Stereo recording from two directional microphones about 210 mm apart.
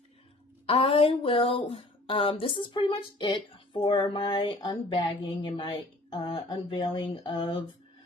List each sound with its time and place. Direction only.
0.7 s speech: 25° left (ahead or behind)